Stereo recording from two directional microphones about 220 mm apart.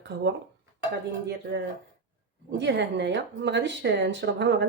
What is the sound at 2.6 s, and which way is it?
Speech, 55° right (ahead or behind).